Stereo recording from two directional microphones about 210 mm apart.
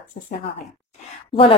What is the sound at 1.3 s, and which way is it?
Speech, 25° left (ahead or behind).